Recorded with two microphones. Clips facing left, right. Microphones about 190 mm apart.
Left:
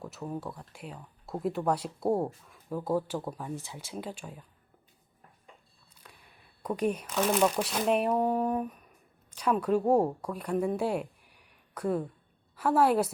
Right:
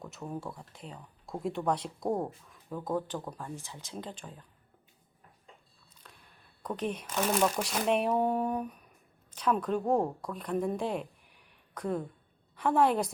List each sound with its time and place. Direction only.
0.0 s speech: centre (ahead or behind)
5.9 s a woman's voice: 10° left (ahead or behind)